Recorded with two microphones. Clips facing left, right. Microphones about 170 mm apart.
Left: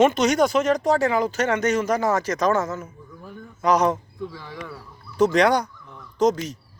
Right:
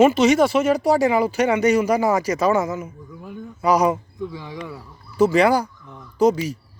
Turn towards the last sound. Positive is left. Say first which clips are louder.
# right 3 dB
turn(degrees=-10)  # may be behind; listen again after turning